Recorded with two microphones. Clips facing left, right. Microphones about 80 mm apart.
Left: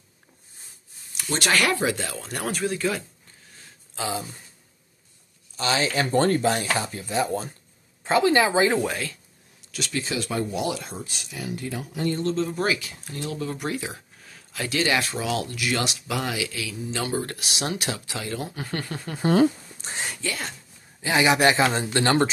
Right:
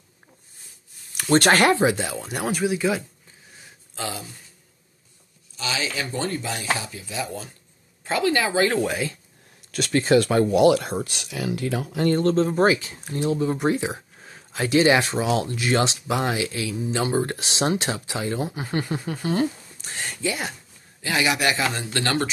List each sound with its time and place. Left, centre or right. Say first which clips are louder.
1.1 s a sound: right 9 dB; right
1.5 s speech: right 1 dB; right; by 3.0 s centre
4.0 s speech: left 1 dB; centre
5.6 s speech: left 4 dB; left
8.0 s a woman's voice: left 3 dB; left
9.7 s speech: right 10 dB; right
12.1 s speech: right 6 dB; right; by 19.0 s centre
20.2 s speech: right 8 dB; centre
21.0 s a woman's voice: left 3 dB; left